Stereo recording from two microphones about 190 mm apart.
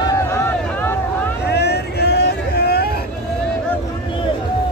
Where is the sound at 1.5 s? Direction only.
60° left (ahead or behind).